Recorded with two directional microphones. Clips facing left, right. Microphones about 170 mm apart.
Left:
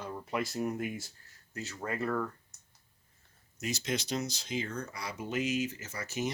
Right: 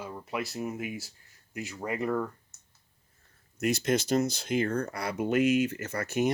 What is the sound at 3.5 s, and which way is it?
Speech, 60° right (ahead or behind).